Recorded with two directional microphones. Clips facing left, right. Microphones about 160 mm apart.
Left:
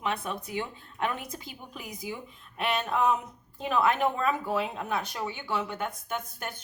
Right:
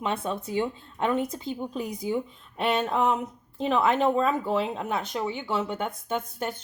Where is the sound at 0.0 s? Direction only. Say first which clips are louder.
Right 3 dB; 25° right (ahead or behind).